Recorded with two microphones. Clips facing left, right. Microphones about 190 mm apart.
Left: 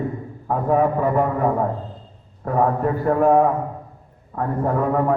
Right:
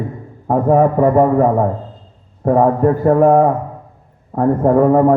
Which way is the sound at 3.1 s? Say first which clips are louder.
Right 5 dB; 45° right (ahead or behind).